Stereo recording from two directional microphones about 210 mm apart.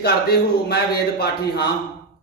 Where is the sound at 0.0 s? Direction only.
45° left (ahead or behind).